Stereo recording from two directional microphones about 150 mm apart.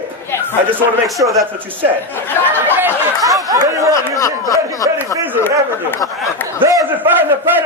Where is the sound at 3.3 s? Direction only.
25° right (ahead or behind).